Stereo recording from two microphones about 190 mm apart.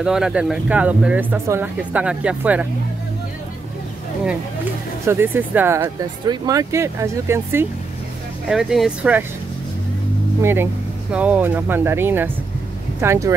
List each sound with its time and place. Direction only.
0.0 s speech: 5° right (ahead or behind)
5.0 s speech: 10° right (ahead or behind)
8.5 s speech: centre (ahead or behind)
10.4 s speech: 10° right (ahead or behind)